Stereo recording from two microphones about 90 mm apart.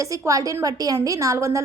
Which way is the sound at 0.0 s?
40° right (ahead or behind).